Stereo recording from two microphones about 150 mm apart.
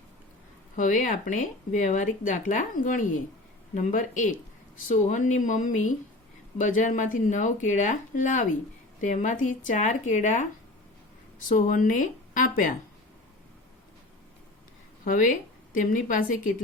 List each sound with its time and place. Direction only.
0.8 s speech: 60° left (ahead or behind)
15.0 s speech: 60° left (ahead or behind)